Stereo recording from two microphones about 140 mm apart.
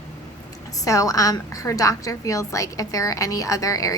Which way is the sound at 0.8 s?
25° left (ahead or behind).